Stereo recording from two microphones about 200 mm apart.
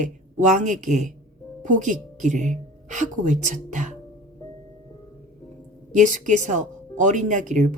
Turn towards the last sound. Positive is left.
turn(degrees=-40)  # may be behind; listen again after turning